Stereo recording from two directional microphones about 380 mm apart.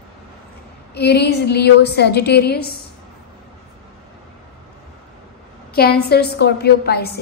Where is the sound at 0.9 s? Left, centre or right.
Left.